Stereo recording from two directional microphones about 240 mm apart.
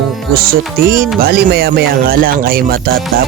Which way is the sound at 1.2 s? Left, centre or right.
Right.